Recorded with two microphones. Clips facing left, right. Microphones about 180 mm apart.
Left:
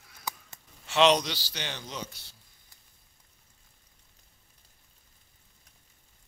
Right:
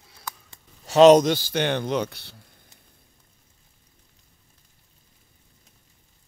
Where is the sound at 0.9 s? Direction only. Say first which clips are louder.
Right 10 dB; 45° right (ahead or behind); by 2.5 s 65° right (ahead or behind).